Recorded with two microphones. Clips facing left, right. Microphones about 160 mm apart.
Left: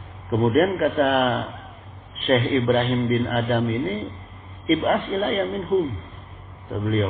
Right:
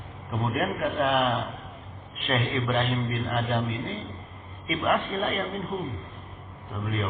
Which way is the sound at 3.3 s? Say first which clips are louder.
Left 6 dB; 55° left (ahead or behind).